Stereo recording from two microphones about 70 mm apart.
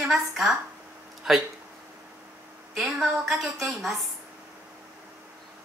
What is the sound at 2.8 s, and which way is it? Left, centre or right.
Speech, centre.